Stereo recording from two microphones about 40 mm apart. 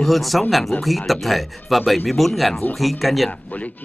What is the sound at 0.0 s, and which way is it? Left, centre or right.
Speech, centre.